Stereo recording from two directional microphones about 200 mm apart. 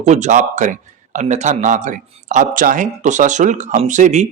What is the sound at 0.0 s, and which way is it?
A man's voice, 35° right (ahead or behind).